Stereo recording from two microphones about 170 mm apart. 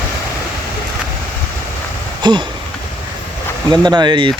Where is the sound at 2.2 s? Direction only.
25° right (ahead or behind).